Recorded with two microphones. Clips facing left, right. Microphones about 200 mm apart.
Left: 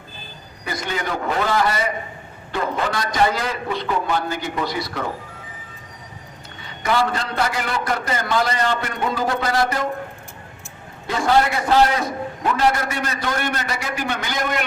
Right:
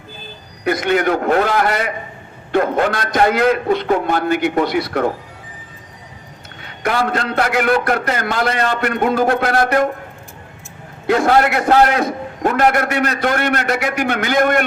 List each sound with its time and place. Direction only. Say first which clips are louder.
0.6 s a man's voice: right 11 dB; 65° right (ahead or behind)
6.6 s a man's voice: right 2 dB; 60° right (ahead or behind)
11.0 s a man's voice: right 5 dB; 60° right (ahead or behind)